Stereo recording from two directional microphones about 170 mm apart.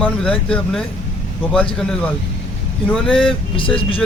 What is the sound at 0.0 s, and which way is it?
Speech, 5° left (ahead or behind).